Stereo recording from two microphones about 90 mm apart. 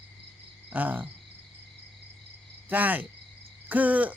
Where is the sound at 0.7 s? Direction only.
20° right (ahead or behind).